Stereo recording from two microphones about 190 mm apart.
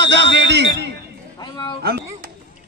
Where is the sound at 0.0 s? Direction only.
65° right (ahead or behind).